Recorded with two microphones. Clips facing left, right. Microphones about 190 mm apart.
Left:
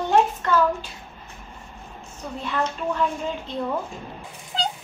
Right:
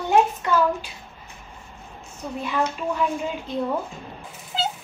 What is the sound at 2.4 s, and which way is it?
Speech, 10° right (ahead or behind).